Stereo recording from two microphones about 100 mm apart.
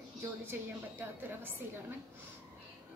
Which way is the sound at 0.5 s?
20° right (ahead or behind).